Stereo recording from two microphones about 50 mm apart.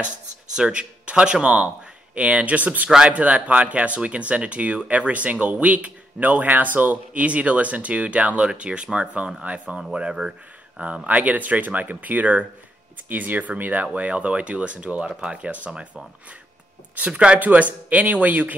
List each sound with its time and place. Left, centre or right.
0.6 s speech: right
11.1 s speech: right
17.4 s speech: right